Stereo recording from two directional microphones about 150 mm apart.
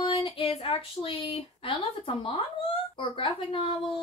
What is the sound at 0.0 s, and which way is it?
Speech, 35° left (ahead or behind).